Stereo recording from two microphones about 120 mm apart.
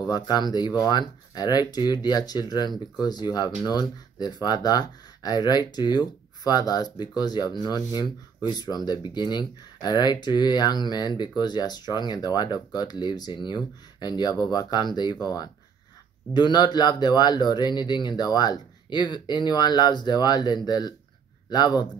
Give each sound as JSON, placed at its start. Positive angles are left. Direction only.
{"t": 0.0, "sound": "speech", "side_deg": 35}